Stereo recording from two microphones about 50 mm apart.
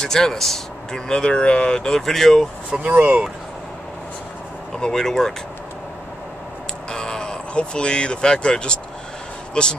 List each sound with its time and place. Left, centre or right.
0.0 s speech: centre
2.9 s speech: right
4.7 s speech: centre
6.9 s speech: centre